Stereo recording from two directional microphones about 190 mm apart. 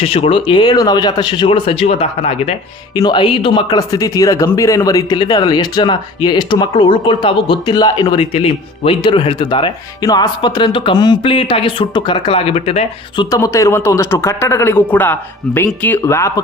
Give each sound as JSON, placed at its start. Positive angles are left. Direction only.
{"t": 0.0, "sound": "speech", "side_deg": 30}
{"t": 13.3, "sound": "a man's voice", "side_deg": 15}